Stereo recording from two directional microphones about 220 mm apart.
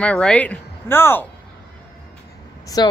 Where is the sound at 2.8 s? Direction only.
20° left (ahead or behind).